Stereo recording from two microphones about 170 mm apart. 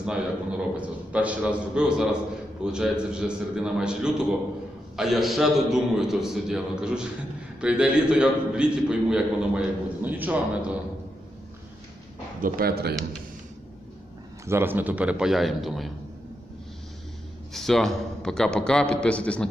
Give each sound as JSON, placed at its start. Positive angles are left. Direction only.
{"t": 0.0, "sound": "a man's voice", "side_deg": -5}
{"t": 12.4, "sound": "speech", "side_deg": -55}
{"t": 14.4, "sound": "a man's voice", "side_deg": -15}
{"t": 17.5, "sound": "a man's voice", "side_deg": 0}